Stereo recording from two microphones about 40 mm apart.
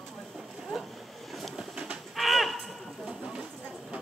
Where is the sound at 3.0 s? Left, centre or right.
Centre.